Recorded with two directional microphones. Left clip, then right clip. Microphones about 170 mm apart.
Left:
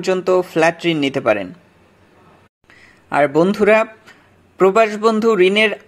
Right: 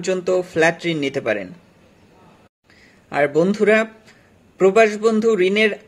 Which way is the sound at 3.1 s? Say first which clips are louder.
Left 3 dB; 20° left (ahead or behind).